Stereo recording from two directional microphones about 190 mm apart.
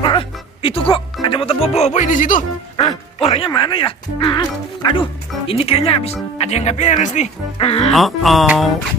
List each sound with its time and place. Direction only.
0.0 s music: 30° left (ahead or behind)
1.2 s speech: 30° left (ahead or behind); by 2.4 s 45° left (ahead or behind)
2.9 s speech: 30° left (ahead or behind)
5.5 s speech: 30° left (ahead or behind)
7.9 s speech: centre (ahead or behind)